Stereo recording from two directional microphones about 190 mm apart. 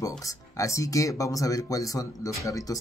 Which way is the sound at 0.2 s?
15° left (ahead or behind).